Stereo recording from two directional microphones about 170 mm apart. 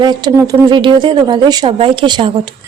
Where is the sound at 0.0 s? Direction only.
20° right (ahead or behind).